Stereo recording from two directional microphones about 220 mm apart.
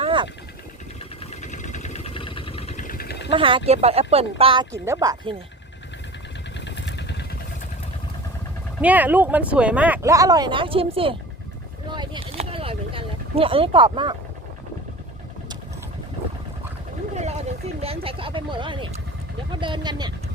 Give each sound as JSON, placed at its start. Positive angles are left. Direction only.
{"t": 0.0, "sound": "vehicle", "side_deg": -20}
{"t": 1.4, "sound": "vehicle", "side_deg": 35}
{"t": 3.3, "sound": "speech", "side_deg": -25}
{"t": 6.7, "sound": "vehicle", "side_deg": 50}
{"t": 8.8, "sound": "speech", "side_deg": -5}
{"t": 11.9, "sound": "a sound", "side_deg": -20}
{"t": 17.7, "sound": "speech", "side_deg": -25}